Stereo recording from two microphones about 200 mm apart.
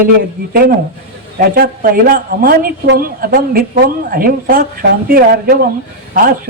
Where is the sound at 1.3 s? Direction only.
45° right (ahead or behind).